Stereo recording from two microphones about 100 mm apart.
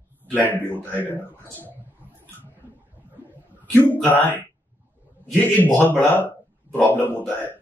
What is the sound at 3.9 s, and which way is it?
Speech, 15° left (ahead or behind).